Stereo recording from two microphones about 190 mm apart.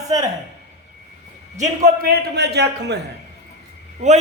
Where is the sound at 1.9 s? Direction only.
55° right (ahead or behind).